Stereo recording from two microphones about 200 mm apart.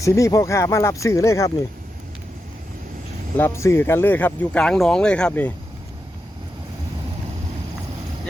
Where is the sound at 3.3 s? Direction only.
10° left (ahead or behind).